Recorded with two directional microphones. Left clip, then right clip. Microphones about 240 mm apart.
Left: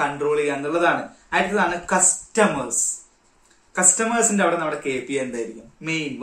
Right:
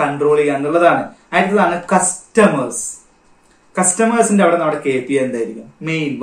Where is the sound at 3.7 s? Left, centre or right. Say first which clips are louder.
Right 6 dB; centre.